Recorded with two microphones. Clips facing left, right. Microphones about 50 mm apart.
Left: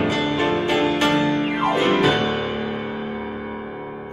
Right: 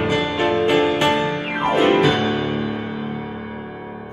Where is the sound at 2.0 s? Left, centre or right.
Centre.